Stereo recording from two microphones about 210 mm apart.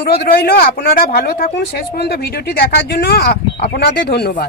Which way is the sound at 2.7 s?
50° left (ahead or behind).